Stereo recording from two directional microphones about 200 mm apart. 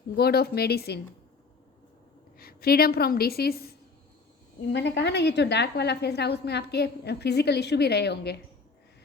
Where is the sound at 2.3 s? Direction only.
50° left (ahead or behind).